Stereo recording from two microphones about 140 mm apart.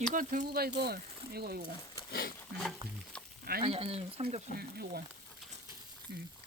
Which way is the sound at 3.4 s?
90° right.